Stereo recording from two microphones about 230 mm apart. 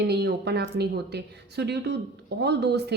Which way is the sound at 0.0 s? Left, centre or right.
Right.